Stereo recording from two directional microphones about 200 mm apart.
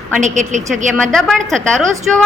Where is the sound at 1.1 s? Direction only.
Centre (ahead or behind).